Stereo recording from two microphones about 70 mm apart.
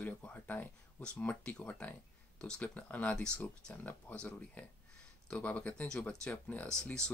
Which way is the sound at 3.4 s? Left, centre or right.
Left.